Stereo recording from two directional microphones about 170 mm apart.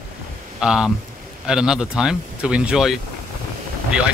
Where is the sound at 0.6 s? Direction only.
5° right (ahead or behind).